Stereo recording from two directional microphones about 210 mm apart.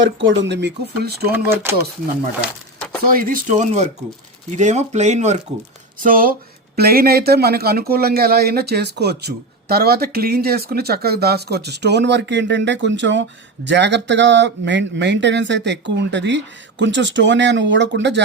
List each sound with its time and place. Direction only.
0.2 s speech: 60° right (ahead or behind)
1.3 s speech: 10° right (ahead or behind)
2.4 s a sound: centre (ahead or behind)
3.0 s a man's voice: 45° right (ahead or behind)